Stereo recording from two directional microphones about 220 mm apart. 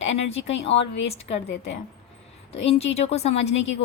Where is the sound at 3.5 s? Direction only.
55° left (ahead or behind).